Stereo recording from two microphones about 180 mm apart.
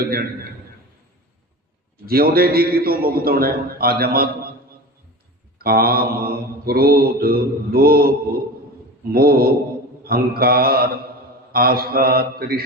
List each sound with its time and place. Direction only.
0.0 s mantra: 55° right (ahead or behind)
2.0 s mantra: 55° right (ahead or behind)
5.5 s mantra: 55° right (ahead or behind)